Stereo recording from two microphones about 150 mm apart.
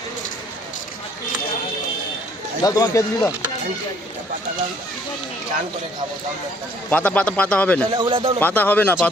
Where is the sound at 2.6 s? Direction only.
25° left (ahead or behind).